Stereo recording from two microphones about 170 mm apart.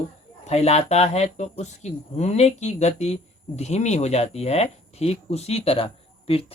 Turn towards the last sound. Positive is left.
turn(degrees=35)  # may be behind; listen again after turning